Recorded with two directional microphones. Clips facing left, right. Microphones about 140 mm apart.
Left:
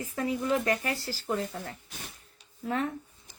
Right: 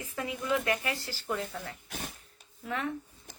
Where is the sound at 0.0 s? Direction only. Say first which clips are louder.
Left 5 dB; 35° left (ahead or behind).